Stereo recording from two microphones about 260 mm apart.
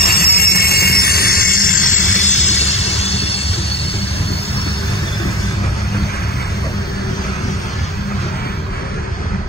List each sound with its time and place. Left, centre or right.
0.0 s train: left